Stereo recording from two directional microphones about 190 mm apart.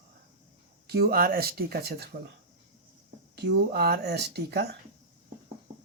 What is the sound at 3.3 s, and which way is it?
Speech, 60° right (ahead or behind).